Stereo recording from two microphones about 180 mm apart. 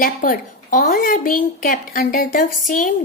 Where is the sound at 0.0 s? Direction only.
50° left (ahead or behind).